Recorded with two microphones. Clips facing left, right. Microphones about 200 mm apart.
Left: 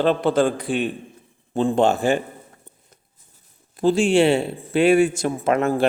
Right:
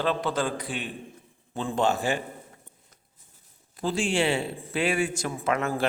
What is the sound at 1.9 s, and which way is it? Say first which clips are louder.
Speech: left 7 dB; 55° left (ahead or behind).